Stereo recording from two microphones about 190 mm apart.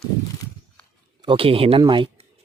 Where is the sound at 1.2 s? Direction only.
30° right (ahead or behind).